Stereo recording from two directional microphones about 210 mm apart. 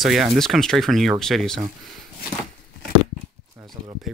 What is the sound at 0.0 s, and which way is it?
Speech, centre (ahead or behind).